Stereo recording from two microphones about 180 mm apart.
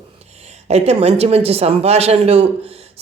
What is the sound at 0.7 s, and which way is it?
Speech, 35° right (ahead or behind).